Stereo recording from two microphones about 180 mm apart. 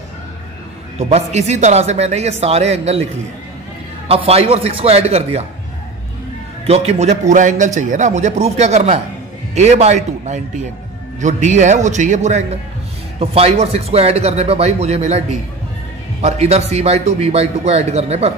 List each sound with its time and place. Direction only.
0.9 s a man's voice: 40° right (ahead or behind)
4.1 s a man's voice: 35° right (ahead or behind)
6.6 s a man's voice: 35° right (ahead or behind)